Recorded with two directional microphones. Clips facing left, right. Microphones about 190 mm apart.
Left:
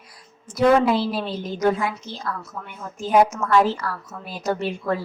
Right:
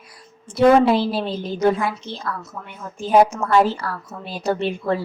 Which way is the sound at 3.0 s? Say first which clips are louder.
Right 2 dB; 30° right (ahead or behind).